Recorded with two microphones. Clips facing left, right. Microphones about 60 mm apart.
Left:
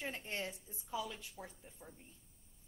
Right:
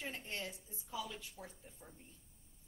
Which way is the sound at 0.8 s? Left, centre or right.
Centre.